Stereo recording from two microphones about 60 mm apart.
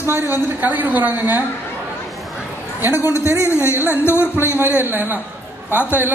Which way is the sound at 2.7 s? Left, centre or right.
Right.